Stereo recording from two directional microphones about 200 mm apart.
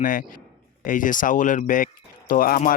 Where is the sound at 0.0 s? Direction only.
45° left (ahead or behind).